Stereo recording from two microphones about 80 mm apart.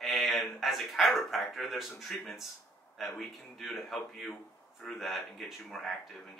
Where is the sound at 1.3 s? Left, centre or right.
Centre.